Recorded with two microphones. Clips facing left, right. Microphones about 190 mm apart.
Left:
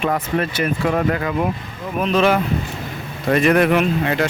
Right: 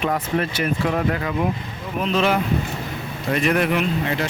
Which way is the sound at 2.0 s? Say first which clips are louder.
Left 3 dB; 55° left (ahead or behind).